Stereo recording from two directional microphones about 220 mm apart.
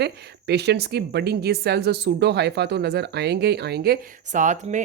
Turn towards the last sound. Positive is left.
turn(degrees=-35)  # may be behind; listen again after turning